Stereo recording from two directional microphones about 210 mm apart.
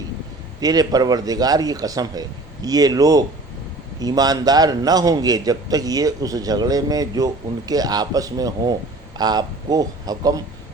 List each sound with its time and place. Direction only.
0.6 s a man's voice: 20° right (ahead or behind)